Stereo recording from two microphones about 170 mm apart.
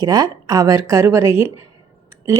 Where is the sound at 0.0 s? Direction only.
20° right (ahead or behind).